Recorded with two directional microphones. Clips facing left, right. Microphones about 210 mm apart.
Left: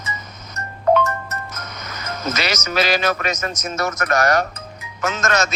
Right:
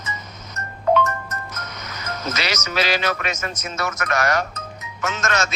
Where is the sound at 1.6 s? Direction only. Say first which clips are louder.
Left 1 dB; 50° left (ahead or behind).